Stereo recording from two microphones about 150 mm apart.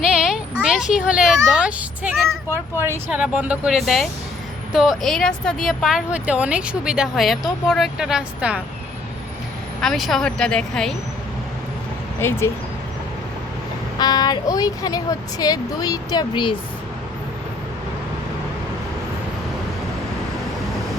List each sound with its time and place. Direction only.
0.2 s speech: 5° right (ahead or behind)
9.8 s speech: centre (ahead or behind)
12.2 s speech: 15° left (ahead or behind)
14.0 s speech: 25° left (ahead or behind)